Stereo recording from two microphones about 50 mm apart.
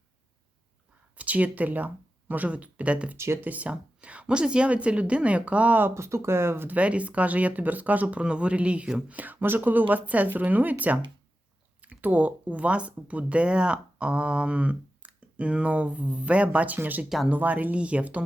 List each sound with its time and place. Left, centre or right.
1.1 s speech: right
3.2 s speech: right
3.4 s speech: right
5.9 s speech: right
6.7 s a woman's voice: right
8.2 s speech: right
9.1 s a woman's voice: right